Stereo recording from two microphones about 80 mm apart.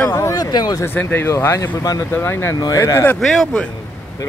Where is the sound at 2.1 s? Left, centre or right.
Left.